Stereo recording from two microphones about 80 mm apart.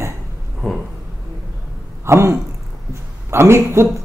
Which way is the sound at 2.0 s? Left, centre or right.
Right.